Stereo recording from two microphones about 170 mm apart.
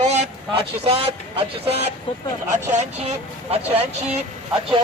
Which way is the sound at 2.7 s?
40° right (ahead or behind).